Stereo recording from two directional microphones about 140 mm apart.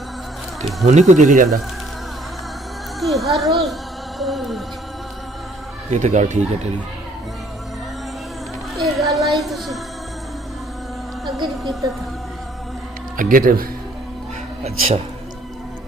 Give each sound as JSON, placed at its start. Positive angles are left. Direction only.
{"t": 0.6, "sound": "speech", "side_deg": 0}
{"t": 0.8, "sound": "speech", "side_deg": -55}
{"t": 3.0, "sound": "speech", "side_deg": 0}
{"t": 5.9, "sound": "speech", "side_deg": -55}
{"t": 8.7, "sound": "children playing", "side_deg": 0}
{"t": 9.4, "sound": "speech", "side_deg": 0}
{"t": 11.2, "sound": "speech", "side_deg": 0}
{"t": 13.2, "sound": "speech", "side_deg": -85}